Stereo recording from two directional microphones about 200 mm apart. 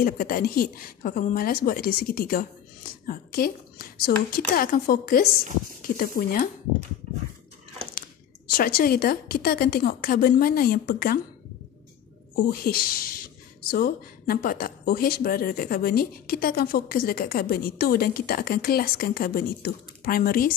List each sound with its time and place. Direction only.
0.0 s a woman's voice: 45° left (ahead or behind)
8.5 s speech: 50° left (ahead or behind)
12.4 s speech: 45° left (ahead or behind)